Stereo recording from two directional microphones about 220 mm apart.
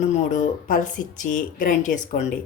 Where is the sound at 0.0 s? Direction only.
35° left (ahead or behind).